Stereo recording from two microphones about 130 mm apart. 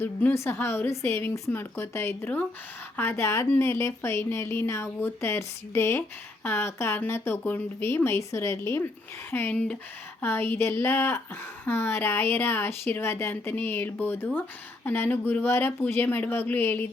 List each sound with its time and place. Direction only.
0.0 s a woman's voice: 15° left (ahead or behind)